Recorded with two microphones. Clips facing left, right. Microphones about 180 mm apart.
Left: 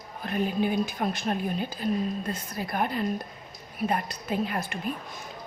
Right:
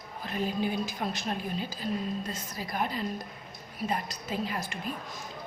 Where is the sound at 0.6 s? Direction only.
55° left (ahead or behind).